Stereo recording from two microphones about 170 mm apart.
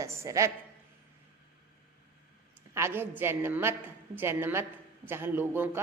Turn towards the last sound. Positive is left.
turn(degrees=-10)  # may be behind; listen again after turning